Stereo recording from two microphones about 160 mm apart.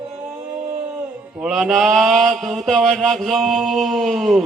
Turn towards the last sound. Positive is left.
turn(degrees=0)  # may be behind; listen again after turning